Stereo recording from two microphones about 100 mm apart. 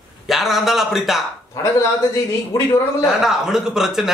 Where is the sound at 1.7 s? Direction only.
30° left (ahead or behind).